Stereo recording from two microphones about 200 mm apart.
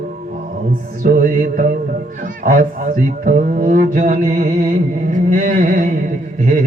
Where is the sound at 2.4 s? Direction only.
40° right (ahead or behind).